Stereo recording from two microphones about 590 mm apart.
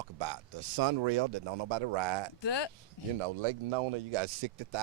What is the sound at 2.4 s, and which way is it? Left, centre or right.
Speech, left.